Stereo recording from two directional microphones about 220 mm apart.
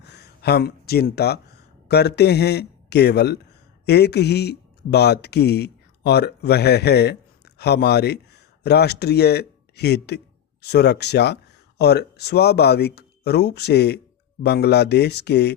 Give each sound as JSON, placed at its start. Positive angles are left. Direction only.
{"t": 0.0, "sound": "speech", "side_deg": 50}